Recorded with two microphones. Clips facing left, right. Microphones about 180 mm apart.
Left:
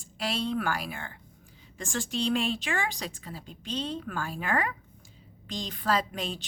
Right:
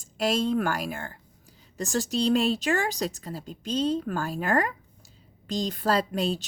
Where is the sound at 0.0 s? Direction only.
45° right (ahead or behind).